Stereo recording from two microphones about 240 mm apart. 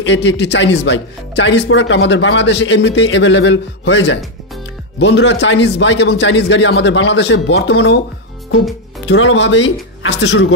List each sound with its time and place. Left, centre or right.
0.0 s speech: left
9.0 s speech: left